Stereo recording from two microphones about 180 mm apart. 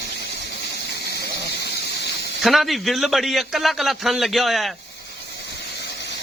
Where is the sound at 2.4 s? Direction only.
Centre (ahead or behind).